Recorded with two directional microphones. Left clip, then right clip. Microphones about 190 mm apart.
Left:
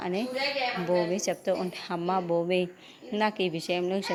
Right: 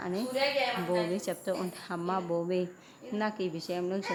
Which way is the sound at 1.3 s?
10° left (ahead or behind).